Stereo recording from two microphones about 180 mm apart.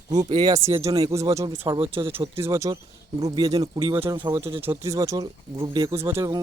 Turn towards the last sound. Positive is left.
turn(degrees=-15)  # may be behind; listen again after turning